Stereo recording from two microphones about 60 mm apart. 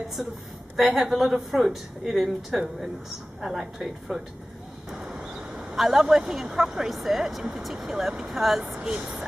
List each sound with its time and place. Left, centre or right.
0.2 s speech: centre
5.0 s vehicle: centre
5.3 s a sound: centre
5.8 s speech: centre